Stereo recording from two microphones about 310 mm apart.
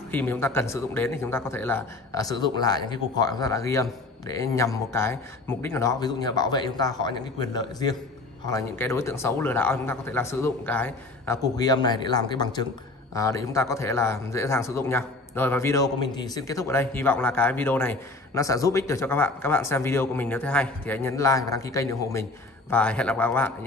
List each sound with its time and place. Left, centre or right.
0.1 s a man's voice: centre